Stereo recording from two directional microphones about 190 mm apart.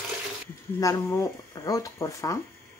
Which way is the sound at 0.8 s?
15° left (ahead or behind).